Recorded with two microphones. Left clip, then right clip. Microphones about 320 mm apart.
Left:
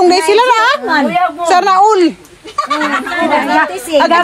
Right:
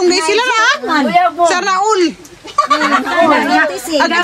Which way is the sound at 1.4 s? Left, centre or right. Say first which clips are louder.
Left 4 dB; centre.